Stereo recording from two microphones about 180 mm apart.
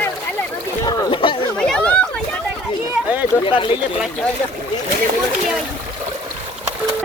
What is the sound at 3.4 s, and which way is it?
Speech, 30° left (ahead or behind).